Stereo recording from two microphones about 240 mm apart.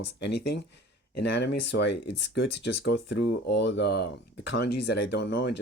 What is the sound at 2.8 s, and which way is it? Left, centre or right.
Speech, left.